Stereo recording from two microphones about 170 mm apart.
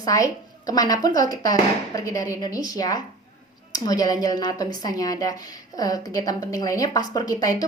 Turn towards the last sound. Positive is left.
turn(degrees=20)  # may be behind; listen again after turning